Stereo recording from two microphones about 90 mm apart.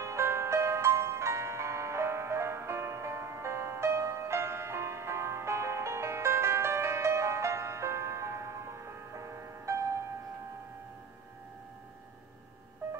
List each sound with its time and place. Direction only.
0.0 s music: 30° right (ahead or behind)